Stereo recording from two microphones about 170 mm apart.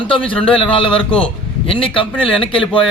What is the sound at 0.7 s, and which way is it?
A man's voice, 30° left (ahead or behind).